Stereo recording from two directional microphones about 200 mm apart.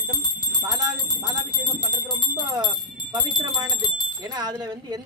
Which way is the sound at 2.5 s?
20° right (ahead or behind).